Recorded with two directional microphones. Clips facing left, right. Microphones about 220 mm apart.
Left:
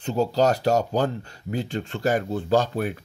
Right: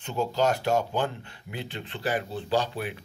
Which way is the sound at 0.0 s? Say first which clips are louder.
Left 5 dB; 35° left (ahead or behind).